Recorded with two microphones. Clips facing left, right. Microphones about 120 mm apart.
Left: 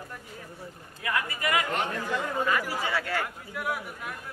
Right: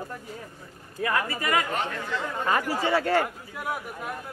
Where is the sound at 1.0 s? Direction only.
35° right (ahead or behind).